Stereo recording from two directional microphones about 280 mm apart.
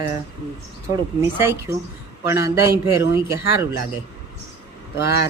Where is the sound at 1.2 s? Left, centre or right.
Centre.